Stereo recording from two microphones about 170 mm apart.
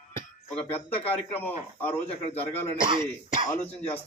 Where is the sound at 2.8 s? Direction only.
30° right (ahead or behind).